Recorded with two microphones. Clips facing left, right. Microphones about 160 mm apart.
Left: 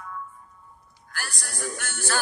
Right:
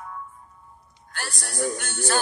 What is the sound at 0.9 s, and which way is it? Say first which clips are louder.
Music: right 2 dB; 25° right (ahead or behind).